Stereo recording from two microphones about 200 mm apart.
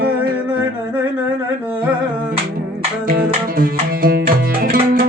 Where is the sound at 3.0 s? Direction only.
45° right (ahead or behind).